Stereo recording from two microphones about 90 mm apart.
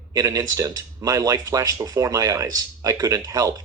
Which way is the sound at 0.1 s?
40° right (ahead or behind).